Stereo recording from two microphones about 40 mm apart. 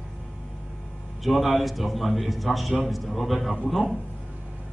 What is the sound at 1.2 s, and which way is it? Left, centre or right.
A man's voice, centre.